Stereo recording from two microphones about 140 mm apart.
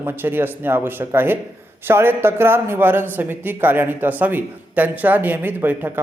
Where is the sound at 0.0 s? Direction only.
15° right (ahead or behind).